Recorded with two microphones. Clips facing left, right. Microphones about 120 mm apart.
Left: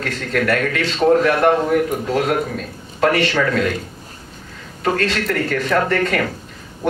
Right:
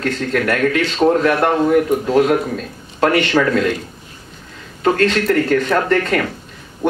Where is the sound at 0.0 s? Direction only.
30° right (ahead or behind).